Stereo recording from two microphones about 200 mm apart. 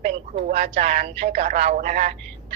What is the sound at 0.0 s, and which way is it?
Speech, 35° right (ahead or behind).